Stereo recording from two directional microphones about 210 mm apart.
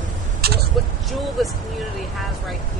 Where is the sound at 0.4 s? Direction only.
45° right (ahead or behind).